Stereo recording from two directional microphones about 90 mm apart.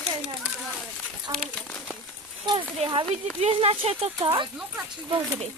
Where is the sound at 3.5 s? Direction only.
90° right.